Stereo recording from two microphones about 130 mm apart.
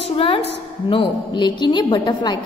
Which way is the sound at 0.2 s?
45° left (ahead or behind).